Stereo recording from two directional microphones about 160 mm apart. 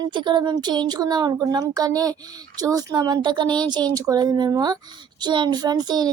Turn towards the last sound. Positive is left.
turn(degrees=-25)  # may be behind; listen again after turning